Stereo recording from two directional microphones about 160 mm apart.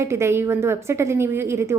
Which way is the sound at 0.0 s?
15° right (ahead or behind).